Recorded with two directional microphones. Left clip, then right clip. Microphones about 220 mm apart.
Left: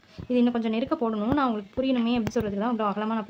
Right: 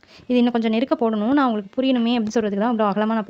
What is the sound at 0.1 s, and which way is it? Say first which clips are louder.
Speech: right 5 dB; 45° right (ahead or behind).